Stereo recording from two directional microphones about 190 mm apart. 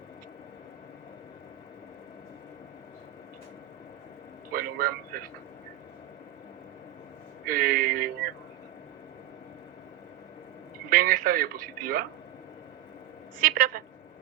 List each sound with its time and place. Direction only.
4.5 s a man's voice: 50° right (ahead or behind)
7.4 s a man's voice: 50° right (ahead or behind)
10.8 s a man's voice: 50° right (ahead or behind)
13.5 s a man's voice: 50° right (ahead or behind)